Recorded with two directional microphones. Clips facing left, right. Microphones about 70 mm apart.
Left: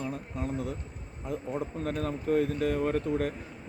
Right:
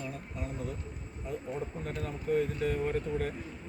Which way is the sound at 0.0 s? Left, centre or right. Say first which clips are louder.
Left 5 dB; left.